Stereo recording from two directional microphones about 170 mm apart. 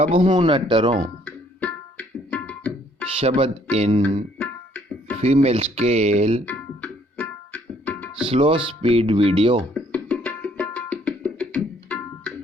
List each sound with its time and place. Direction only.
0.0 s speech: 35° right (ahead or behind)
1.2 s tabla: 10° left (ahead or behind)
3.2 s speech: 35° right (ahead or behind)
4.4 s tabla: 10° left (ahead or behind)
5.2 s speech: 40° right (ahead or behind)
6.4 s music: 10° left (ahead or behind)
8.3 s speech: 30° right (ahead or behind)
9.7 s music: 10° left (ahead or behind)